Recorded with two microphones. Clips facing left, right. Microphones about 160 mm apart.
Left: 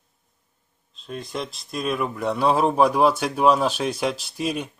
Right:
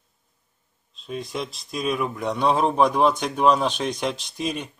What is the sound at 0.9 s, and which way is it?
Speech, centre (ahead or behind).